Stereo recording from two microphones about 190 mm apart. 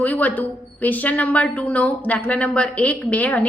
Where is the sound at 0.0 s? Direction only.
10° left (ahead or behind).